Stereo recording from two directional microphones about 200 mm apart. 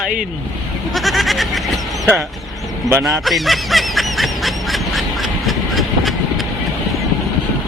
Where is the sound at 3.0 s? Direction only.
Centre (ahead or behind).